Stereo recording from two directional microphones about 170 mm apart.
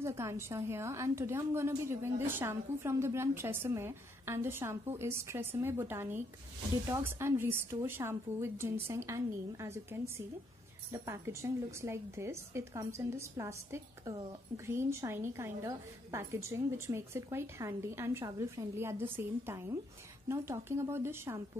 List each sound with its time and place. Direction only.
0.0 s a woman's voice: 15° right (ahead or behind)